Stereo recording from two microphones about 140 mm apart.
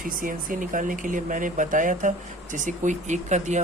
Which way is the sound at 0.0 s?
75° right (ahead or behind).